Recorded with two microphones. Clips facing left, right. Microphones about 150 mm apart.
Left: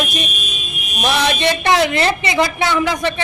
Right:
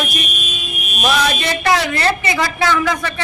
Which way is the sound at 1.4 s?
20° left (ahead or behind).